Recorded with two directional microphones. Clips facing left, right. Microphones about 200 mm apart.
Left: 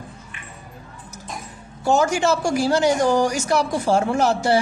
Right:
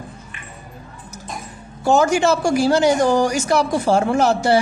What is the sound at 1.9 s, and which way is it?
Speech, 70° right (ahead or behind).